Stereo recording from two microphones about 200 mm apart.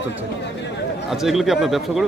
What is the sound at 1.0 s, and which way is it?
Speech, centre (ahead or behind).